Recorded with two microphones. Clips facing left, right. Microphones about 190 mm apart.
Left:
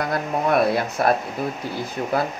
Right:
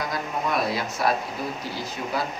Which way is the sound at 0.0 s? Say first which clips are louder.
Left 5 dB; 60° left (ahead or behind).